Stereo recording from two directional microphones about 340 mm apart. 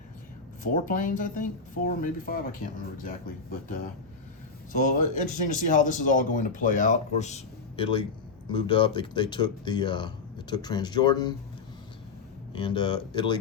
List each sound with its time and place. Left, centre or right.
0.6 s speech: left
12.5 s speech: centre